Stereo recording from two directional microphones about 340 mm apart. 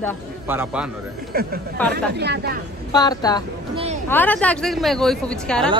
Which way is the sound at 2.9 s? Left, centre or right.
Centre.